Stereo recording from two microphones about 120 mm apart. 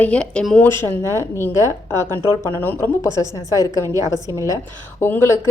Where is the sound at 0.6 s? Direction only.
20° left (ahead or behind).